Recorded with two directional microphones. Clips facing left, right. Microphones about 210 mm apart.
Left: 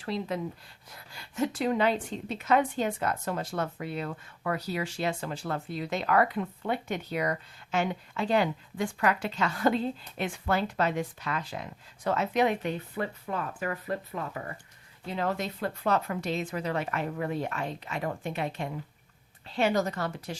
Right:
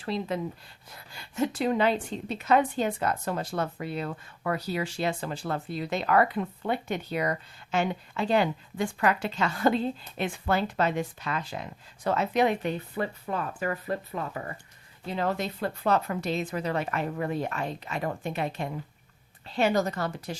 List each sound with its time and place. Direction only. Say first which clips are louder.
0.0 s speech: right 2 dB; 25° right (ahead or behind)